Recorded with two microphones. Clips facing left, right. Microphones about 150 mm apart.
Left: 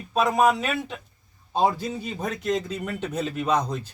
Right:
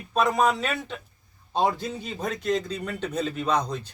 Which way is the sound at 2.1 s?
10° left (ahead or behind).